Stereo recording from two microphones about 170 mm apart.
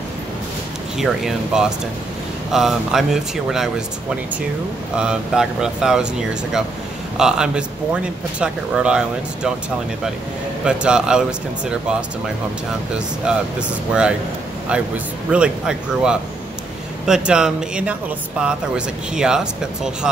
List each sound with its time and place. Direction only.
0.9 s speech: centre (ahead or behind)
4.9 s speech: 5° right (ahead or behind)
7.2 s speech: 5° right (ahead or behind)
10.6 s speech: 5° right (ahead or behind)
13.2 s speech: 5° right (ahead or behind)
15.3 s speech: 5° right (ahead or behind)